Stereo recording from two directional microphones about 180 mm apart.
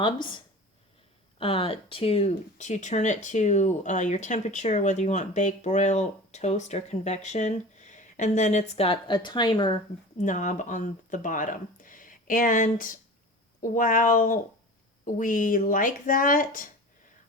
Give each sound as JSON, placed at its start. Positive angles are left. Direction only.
{"t": 0.0, "sound": "speech", "side_deg": 25}
{"t": 10.2, "sound": "speech", "side_deg": 45}